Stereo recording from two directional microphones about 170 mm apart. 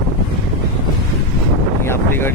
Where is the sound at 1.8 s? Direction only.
15° left (ahead or behind).